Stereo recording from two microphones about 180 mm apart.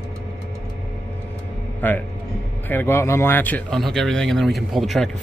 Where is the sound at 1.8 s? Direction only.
10° left (ahead or behind).